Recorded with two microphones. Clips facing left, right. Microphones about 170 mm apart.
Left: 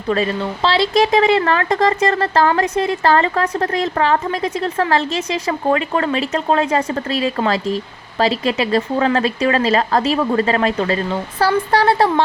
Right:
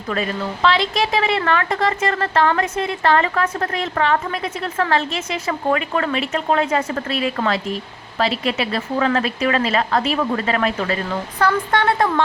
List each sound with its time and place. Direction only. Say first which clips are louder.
0.1 s speech: left 5 dB; 30° left (ahead or behind)